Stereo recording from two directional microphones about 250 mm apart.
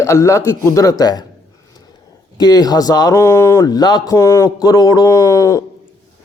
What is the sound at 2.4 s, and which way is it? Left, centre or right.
A man's voice, centre.